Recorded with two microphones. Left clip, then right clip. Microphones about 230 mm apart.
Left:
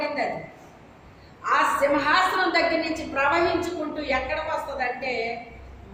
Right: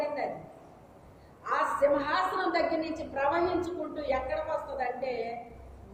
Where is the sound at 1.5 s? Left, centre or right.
Left.